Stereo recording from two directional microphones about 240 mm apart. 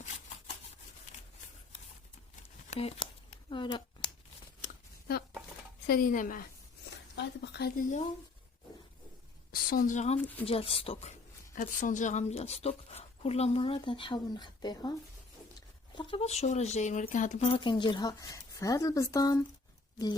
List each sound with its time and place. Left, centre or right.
2.6 s speech: left
4.6 s a sound: left
5.9 s a woman's voice: left
9.5 s a woman's voice: left; by 14.9 s centre
16.0 s speech: left